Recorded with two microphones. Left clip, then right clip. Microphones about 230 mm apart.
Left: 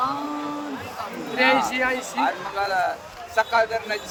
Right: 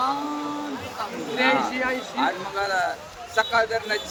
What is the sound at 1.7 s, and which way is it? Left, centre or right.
Speech, left.